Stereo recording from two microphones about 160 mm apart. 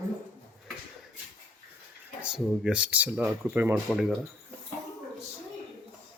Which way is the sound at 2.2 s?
5° right (ahead or behind).